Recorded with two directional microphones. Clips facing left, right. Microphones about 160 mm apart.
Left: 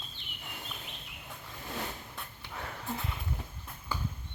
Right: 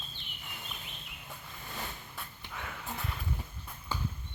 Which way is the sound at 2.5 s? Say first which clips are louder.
Left 1 dB; 35° left (ahead or behind).